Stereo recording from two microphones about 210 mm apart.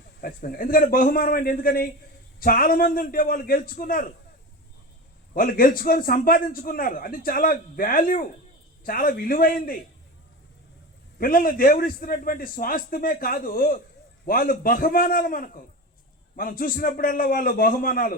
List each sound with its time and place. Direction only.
0.2 s a man's voice: 45° left (ahead or behind)
5.3 s a man's voice: 45° left (ahead or behind)
11.2 s a man's voice: 45° left (ahead or behind)